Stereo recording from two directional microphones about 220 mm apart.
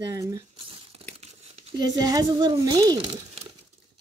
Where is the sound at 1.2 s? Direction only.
30° right (ahead or behind).